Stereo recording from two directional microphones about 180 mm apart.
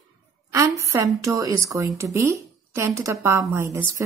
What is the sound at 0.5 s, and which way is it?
A woman's voice, 15° right (ahead or behind).